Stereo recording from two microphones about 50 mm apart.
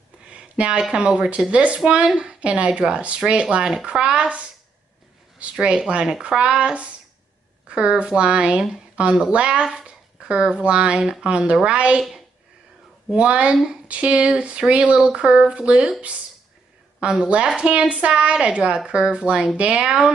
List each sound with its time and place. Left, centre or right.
0.3 s a sound: right
0.9 s speech: centre
13.1 s speech: right
17.0 s speech: centre